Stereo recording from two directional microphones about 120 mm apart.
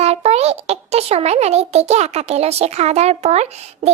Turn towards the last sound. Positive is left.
turn(degrees=-65)  # may be behind; listen again after turning